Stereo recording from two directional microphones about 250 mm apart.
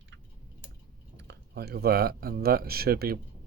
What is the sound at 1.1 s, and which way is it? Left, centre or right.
Speech, right.